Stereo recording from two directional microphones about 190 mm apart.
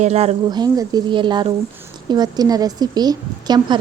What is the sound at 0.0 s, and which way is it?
Speech, 35° right (ahead or behind).